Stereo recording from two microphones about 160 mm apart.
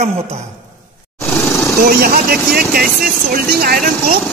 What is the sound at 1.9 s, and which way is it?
Speech, 70° right (ahead or behind).